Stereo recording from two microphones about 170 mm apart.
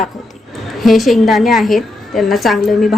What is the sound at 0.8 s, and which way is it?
A woman's voice, centre (ahead or behind).